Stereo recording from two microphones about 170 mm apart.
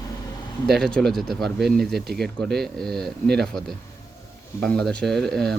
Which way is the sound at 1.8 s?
70° right (ahead or behind).